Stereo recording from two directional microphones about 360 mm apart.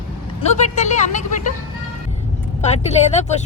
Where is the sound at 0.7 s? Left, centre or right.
Centre.